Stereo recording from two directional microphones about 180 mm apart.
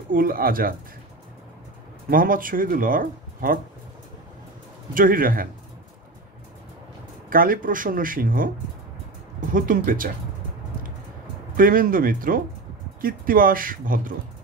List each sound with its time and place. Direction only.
0.1 s speech: 55° right (ahead or behind)
2.0 s speech: 50° right (ahead or behind)
4.9 s speech: 50° right (ahead or behind)
7.2 s speech: 50° right (ahead or behind)
9.5 s speech: 50° right (ahead or behind)
11.5 s speech: 50° right (ahead or behind)